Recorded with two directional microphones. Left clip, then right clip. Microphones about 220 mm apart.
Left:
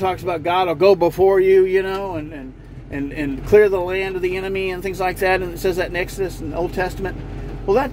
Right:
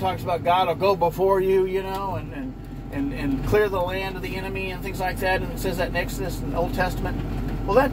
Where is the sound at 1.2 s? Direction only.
30° left (ahead or behind).